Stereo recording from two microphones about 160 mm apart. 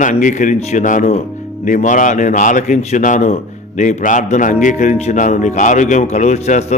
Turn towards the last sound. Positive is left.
turn(degrees=45)  # may be behind; listen again after turning